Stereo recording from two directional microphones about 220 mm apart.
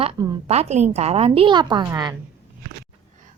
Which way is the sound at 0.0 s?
20° right (ahead or behind).